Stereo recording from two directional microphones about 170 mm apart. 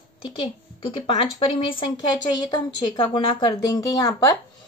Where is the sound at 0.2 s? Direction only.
30° left (ahead or behind).